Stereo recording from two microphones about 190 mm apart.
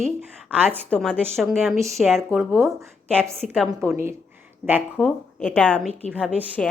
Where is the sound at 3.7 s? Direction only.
15° right (ahead or behind).